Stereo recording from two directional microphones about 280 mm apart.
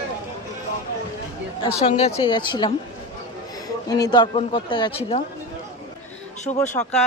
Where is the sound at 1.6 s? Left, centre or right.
Centre.